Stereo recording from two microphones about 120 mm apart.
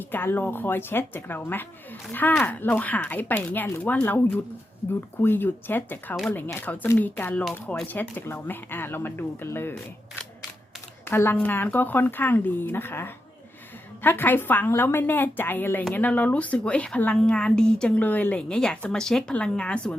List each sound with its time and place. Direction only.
0.0 s speech: 15° left (ahead or behind)
11.0 s speech: 20° left (ahead or behind)